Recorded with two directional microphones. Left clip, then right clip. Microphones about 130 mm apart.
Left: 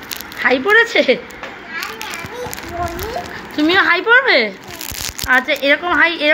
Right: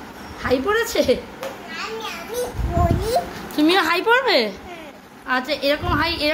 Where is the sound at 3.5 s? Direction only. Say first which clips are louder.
Left 4 dB; 10° right (ahead or behind).